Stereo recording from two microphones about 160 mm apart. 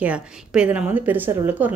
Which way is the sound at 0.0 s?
5° right (ahead or behind).